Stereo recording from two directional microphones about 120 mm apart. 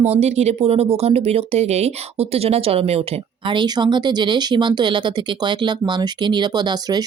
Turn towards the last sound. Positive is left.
turn(degrees=-35)  # may be behind; listen again after turning